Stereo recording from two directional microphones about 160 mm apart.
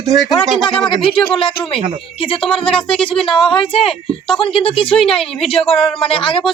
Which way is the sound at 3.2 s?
35° left (ahead or behind).